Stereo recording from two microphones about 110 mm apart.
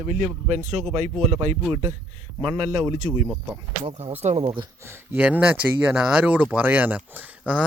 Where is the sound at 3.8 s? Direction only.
65° right (ahead or behind).